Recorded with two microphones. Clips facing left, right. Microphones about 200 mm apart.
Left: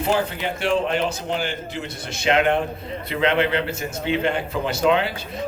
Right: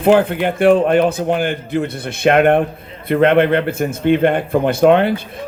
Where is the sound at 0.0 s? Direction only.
55° right (ahead or behind).